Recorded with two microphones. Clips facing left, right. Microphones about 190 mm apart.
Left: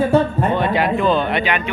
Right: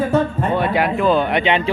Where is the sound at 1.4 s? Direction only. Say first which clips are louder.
Right 3 dB; 25° right (ahead or behind).